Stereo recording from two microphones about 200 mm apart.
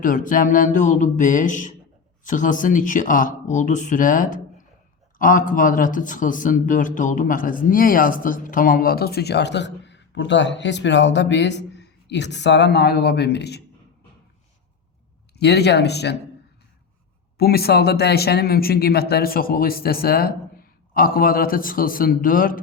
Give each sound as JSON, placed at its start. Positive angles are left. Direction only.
{"t": 0.0, "sound": "speech", "side_deg": 40}
{"t": 15.4, "sound": "speech", "side_deg": 55}
{"t": 17.3, "sound": "speech", "side_deg": 50}